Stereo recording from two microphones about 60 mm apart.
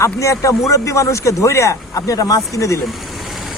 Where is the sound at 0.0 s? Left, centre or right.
Left.